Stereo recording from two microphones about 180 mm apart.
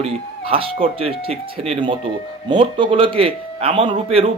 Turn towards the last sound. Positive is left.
turn(degrees=-30)  # may be behind; listen again after turning